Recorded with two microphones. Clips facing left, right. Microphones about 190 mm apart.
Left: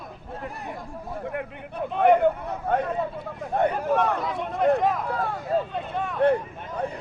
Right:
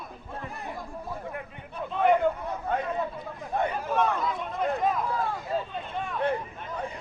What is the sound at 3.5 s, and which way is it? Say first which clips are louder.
Speech: left 5 dB; 60° left (ahead or behind).